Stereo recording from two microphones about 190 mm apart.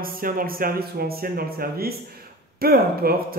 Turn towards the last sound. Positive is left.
turn(degrees=-55)  # may be behind; listen again after turning